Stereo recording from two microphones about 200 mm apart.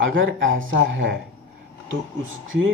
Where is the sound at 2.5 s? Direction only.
70° right (ahead or behind).